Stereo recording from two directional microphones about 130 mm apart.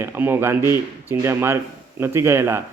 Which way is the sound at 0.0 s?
15° right (ahead or behind).